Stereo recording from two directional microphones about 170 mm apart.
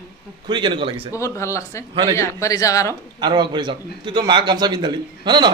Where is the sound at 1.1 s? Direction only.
15° left (ahead or behind).